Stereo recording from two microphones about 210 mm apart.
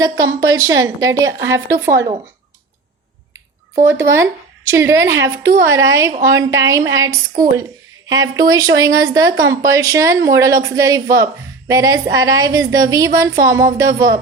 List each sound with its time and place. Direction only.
0.3 s speech: 15° right (ahead or behind)
3.8 s speech: 15° right (ahead or behind)